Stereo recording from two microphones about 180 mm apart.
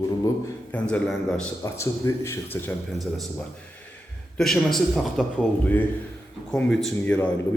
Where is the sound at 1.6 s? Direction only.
15° left (ahead or behind).